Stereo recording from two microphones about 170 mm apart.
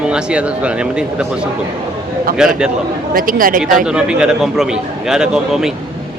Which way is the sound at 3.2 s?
55° right (ahead or behind).